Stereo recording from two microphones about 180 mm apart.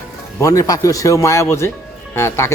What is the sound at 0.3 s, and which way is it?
A man's voice, 20° left (ahead or behind).